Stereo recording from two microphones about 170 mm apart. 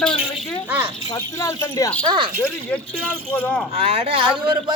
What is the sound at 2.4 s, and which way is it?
Speech, 5° left (ahead or behind).